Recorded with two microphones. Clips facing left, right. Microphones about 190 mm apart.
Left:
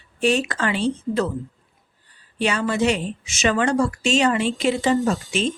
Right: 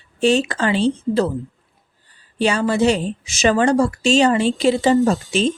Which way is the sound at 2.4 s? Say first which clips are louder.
Right 4 dB; 35° right (ahead or behind).